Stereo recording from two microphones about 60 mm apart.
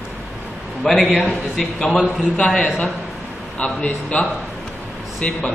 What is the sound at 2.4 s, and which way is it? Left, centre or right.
A man's voice, centre.